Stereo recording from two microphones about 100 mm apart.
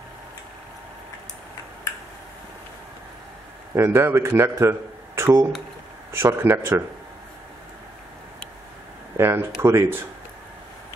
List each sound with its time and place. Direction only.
3.7 s a man's voice: 25° right (ahead or behind)
9.1 s speech: 25° right (ahead or behind)